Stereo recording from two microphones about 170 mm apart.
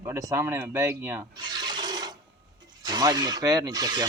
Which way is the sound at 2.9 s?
25° right (ahead or behind).